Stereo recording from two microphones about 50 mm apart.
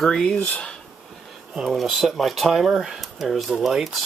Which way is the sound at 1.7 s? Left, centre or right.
Centre.